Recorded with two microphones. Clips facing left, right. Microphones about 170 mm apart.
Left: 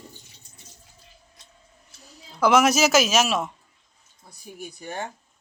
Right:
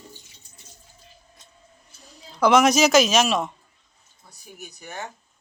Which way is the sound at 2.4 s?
5° left (ahead or behind).